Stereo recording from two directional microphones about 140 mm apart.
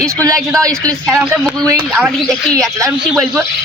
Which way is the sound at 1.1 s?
Centre (ahead or behind).